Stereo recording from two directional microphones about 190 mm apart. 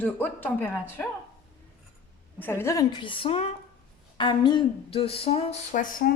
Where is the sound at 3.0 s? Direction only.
30° left (ahead or behind).